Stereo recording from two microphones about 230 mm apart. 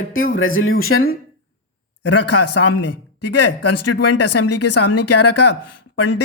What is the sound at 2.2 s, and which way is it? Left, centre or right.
Speech, left.